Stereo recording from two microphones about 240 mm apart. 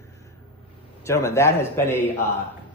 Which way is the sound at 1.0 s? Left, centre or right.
Centre.